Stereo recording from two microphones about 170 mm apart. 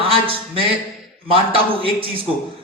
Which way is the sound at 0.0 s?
35° right (ahead or behind).